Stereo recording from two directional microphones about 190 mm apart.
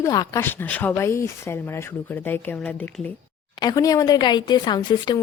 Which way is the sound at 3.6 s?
20° left (ahead or behind).